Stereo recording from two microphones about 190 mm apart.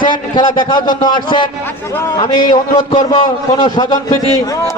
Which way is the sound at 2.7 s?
30° left (ahead or behind).